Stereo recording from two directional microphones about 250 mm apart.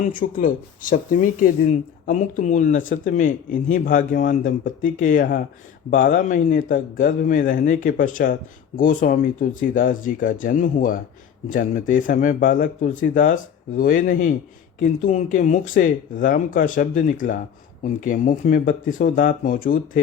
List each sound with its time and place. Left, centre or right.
0.0 s a man's voice: left